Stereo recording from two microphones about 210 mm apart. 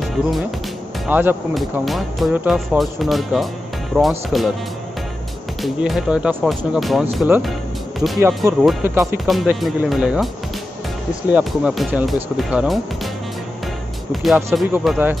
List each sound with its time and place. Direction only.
1.0 s speech: 5° right (ahead or behind)
5.6 s speech: centre (ahead or behind)
11.3 s speech: 5° right (ahead or behind)
14.1 s speech: centre (ahead or behind)